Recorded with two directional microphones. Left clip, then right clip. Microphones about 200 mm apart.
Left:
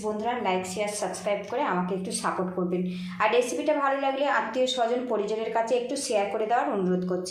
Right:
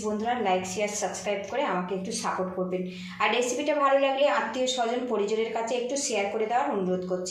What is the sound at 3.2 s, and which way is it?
A woman's voice, 25° left (ahead or behind).